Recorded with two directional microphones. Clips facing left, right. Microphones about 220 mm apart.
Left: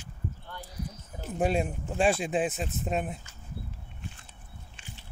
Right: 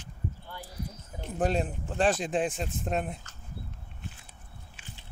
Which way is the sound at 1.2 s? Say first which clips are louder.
Left 1 dB; 5° left (ahead or behind).